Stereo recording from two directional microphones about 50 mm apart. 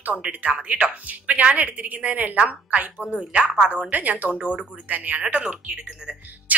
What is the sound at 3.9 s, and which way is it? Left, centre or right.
A woman's voice, right.